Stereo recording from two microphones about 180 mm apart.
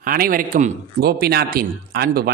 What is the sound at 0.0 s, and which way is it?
Speech, 55° right (ahead or behind).